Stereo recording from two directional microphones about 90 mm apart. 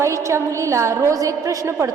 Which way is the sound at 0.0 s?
35° right (ahead or behind).